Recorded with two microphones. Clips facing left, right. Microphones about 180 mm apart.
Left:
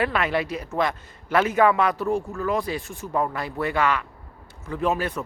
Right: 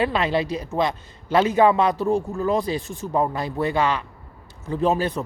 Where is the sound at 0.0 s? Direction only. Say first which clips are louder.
Right 2 dB; 30° right (ahead or behind).